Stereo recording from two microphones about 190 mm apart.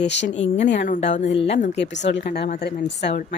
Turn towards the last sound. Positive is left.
turn(degrees=65)  # may be behind; listen again after turning